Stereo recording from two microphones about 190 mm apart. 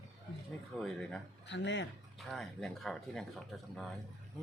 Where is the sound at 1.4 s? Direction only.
70° left (ahead or behind).